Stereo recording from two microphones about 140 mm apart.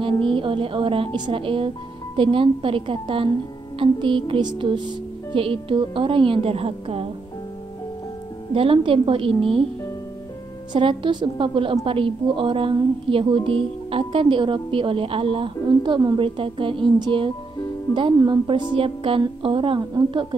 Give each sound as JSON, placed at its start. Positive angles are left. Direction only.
{"t": 0.0, "sound": "a woman's voice", "side_deg": -40}
{"t": 8.5, "sound": "a woman's voice", "side_deg": -40}
{"t": 10.7, "sound": "a woman's voice", "side_deg": -35}